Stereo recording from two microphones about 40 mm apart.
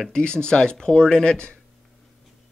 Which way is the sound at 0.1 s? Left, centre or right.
Left.